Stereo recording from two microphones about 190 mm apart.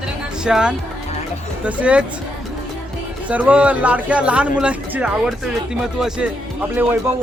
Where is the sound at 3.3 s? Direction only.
5° right (ahead or behind).